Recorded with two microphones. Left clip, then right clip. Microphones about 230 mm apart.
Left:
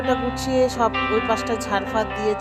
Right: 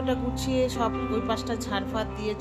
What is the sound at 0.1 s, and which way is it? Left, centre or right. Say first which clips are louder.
Speech: left 7 dB; left.